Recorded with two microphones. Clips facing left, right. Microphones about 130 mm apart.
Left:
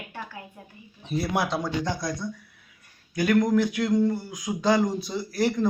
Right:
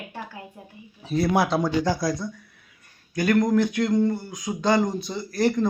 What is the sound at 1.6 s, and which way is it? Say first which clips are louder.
A man's voice: right 5 dB; 5° right (ahead or behind).